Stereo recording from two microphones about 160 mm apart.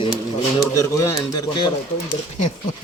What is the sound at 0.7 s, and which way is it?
Speech, 20° left (ahead or behind).